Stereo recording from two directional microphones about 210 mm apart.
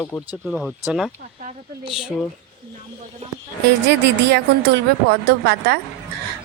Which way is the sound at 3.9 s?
55° right (ahead or behind).